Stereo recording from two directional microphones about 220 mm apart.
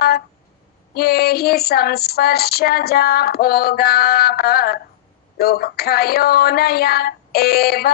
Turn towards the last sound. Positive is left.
turn(degrees=45)  # may be behind; listen again after turning